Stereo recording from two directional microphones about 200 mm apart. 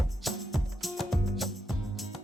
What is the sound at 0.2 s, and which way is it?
Music, centre (ahead or behind).